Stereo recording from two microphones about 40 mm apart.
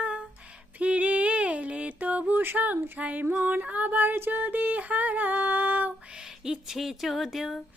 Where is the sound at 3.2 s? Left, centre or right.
Right.